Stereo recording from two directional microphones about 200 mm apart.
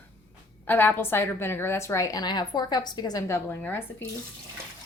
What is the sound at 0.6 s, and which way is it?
A woman's voice, 10° left (ahead or behind).